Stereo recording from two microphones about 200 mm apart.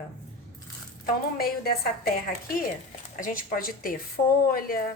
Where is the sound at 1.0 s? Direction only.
50° left (ahead or behind).